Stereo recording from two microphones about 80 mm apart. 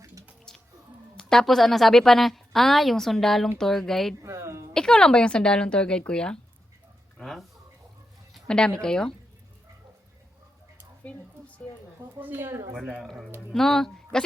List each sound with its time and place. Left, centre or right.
0.0 s music: right
0.5 s music: centre
1.1 s a woman's voice: centre
4.2 s a sound: right
4.7 s a woman's voice: centre
8.4 s speech: centre
11.0 s a sound: centre
12.2 s a woman's voice: right
12.9 s a woman's voice: centre